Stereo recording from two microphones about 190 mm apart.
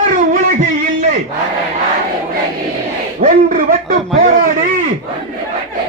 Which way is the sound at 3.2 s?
45° right (ahead or behind).